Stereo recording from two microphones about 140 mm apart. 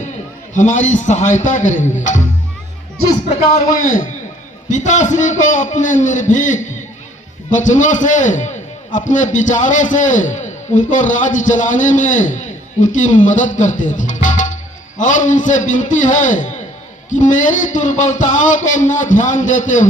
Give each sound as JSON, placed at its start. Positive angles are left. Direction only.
{"t": 0.5, "sound": "a man's voice", "side_deg": 65}
{"t": 3.8, "sound": "a man's voice", "side_deg": 70}
{"t": 4.7, "sound": "a man's voice", "side_deg": 60}